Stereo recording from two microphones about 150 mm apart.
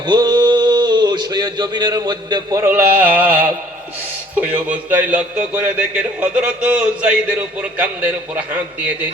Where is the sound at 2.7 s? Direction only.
10° right (ahead or behind).